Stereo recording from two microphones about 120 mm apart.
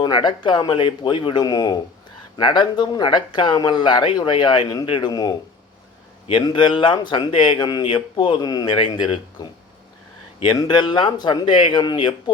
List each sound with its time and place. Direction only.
0.0 s speech: 40° left (ahead or behind)
6.4 s speech: 40° left (ahead or behind)